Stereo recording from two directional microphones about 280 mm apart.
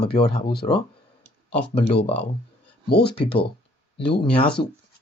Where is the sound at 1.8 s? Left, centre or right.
Left.